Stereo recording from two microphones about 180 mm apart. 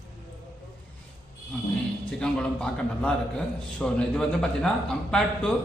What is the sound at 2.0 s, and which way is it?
A man's voice, 5° left (ahead or behind).